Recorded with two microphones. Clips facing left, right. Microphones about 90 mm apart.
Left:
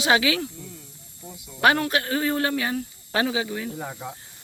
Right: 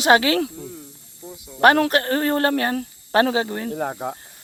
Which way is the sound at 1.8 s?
50° right (ahead or behind).